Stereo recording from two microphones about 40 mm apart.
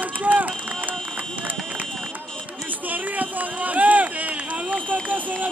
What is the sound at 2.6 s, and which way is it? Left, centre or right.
Run, right.